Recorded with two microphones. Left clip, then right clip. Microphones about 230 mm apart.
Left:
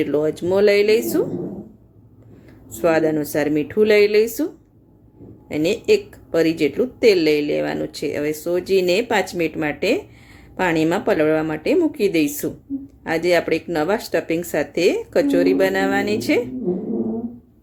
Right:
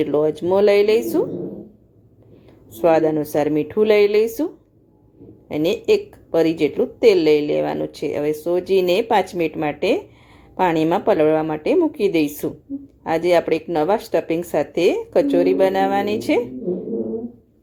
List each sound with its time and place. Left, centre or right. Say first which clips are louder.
0.0 s speech: right 1 dB; centre
2.7 s speech: right 2 dB; centre
5.5 s speech: even; centre